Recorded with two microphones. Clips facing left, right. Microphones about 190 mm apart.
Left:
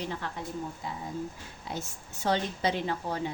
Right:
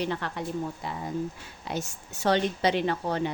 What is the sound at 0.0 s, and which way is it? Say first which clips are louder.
A woman's voice: right 5 dB; 75° right (ahead or behind).